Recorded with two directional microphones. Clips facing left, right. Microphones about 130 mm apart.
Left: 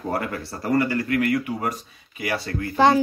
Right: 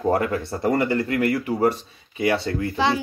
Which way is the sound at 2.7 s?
45° left (ahead or behind).